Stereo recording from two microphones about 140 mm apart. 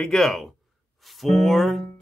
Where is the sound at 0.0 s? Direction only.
5° left (ahead or behind).